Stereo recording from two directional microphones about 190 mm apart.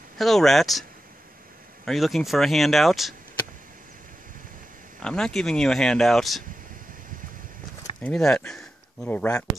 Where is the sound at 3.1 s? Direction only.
45° right (ahead or behind).